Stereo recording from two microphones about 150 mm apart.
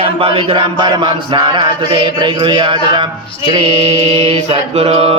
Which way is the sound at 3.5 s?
40° right (ahead or behind).